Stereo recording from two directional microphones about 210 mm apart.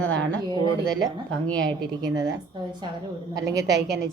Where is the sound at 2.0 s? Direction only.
15° right (ahead or behind).